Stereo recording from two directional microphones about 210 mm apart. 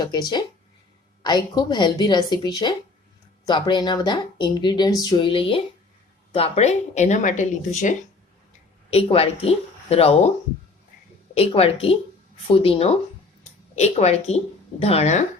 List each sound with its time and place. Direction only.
0.0 s speech: 20° left (ahead or behind)
11.3 s speech: 25° left (ahead or behind)
13.4 s a sound: 30° left (ahead or behind)
14.8 s speech: 30° left (ahead or behind)